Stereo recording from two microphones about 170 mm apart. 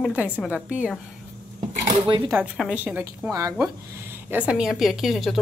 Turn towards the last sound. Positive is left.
turn(degrees=0)  # may be behind; listen again after turning